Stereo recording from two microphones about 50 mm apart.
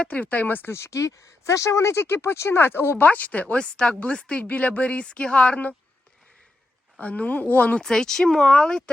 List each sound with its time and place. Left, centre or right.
0.0 s speech: left
0.7 s speech: left
3.0 s speech: left
7.0 s speech: left
7.8 s speech: centre